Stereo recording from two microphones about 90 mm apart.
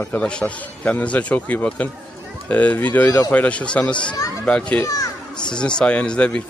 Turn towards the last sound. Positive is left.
turn(degrees=10)  # may be behind; listen again after turning